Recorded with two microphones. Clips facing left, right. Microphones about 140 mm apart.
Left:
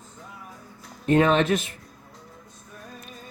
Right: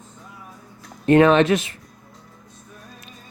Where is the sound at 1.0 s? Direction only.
75° right (ahead or behind).